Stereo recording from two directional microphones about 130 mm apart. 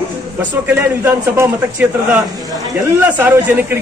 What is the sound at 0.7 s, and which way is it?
A man's voice, 15° right (ahead or behind).